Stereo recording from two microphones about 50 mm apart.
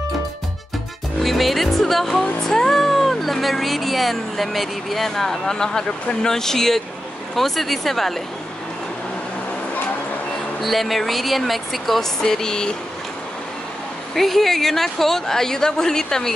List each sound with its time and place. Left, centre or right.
1.2 s music: centre
2.2 s a woman's voice: centre
10.6 s speech: centre
14.1 s a woman's voice: centre